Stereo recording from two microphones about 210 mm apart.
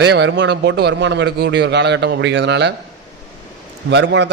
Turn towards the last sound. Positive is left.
turn(degrees=-55)  # may be behind; listen again after turning